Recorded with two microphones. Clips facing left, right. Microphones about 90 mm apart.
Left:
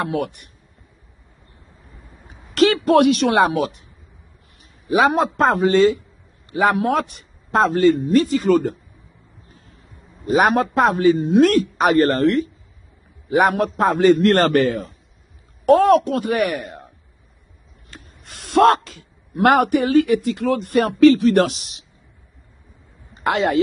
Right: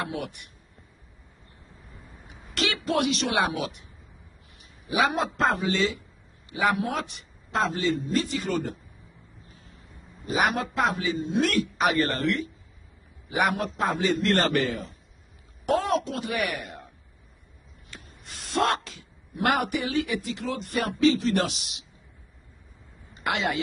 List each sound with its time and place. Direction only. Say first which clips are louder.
0.0 s speech: left 9 dB; 45° left (ahead or behind)
2.2 s speech: left 13 dB; 40° left (ahead or behind)
4.8 s speech: left 8 dB; 45° left (ahead or behind)
8.4 s speech: left 12 dB; 40° left (ahead or behind)
10.2 s speech: left 9 dB; 45° left (ahead or behind)
11.4 s a woman's voice: left 9 dB; 40° left (ahead or behind)
17.8 s a sound: left 4 dB; 40° left (ahead or behind)
18.2 s a sound: left 11 dB; 60° left (ahead or behind)
18.7 s speech: left 11 dB; 45° left (ahead or behind); by 21.5 s 60° left (ahead or behind)
21.5 s speech: left 6 dB; 40° left (ahead or behind)
23.1 s speech: left 9 dB; 40° left (ahead or behind)